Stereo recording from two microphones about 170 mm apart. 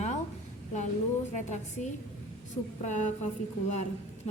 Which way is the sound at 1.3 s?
45° left (ahead or behind).